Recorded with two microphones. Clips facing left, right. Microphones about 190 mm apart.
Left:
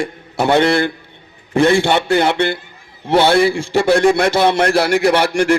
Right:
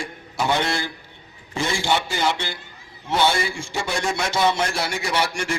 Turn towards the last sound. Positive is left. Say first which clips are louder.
# left 11 dB
turn(degrees=60)  # may be behind; listen again after turning